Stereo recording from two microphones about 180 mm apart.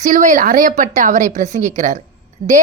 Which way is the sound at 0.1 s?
45° right (ahead or behind).